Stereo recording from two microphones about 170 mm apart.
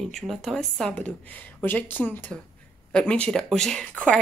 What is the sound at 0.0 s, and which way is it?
Speech, centre (ahead or behind).